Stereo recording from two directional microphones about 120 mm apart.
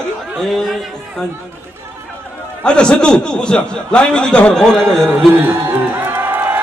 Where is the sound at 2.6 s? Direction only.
5° left (ahead or behind).